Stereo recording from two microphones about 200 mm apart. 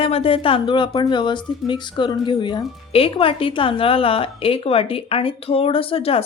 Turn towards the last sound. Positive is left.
turn(degrees=30)  # may be behind; listen again after turning